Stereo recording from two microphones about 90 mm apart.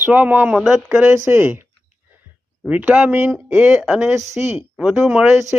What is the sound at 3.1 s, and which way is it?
Speech, 25° right (ahead or behind).